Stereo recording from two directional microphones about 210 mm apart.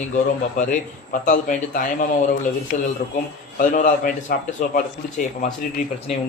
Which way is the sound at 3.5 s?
40° left (ahead or behind).